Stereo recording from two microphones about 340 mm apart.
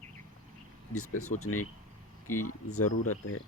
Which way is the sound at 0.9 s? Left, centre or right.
Left.